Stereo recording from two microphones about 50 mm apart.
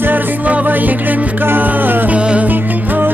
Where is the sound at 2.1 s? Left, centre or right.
Right.